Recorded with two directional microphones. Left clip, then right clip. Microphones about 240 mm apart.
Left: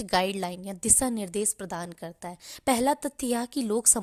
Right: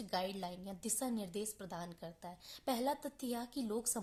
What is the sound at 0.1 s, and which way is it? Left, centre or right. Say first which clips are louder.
A woman's voice: left 14 dB; left.